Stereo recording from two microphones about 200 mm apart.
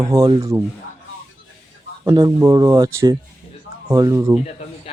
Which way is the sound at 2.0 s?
20° right (ahead or behind).